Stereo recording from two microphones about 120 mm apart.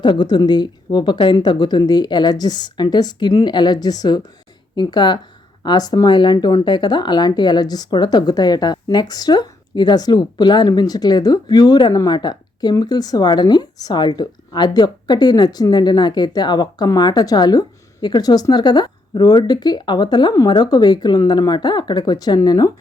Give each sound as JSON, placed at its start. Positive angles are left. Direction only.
{"t": 0.0, "sound": "speech", "side_deg": 40}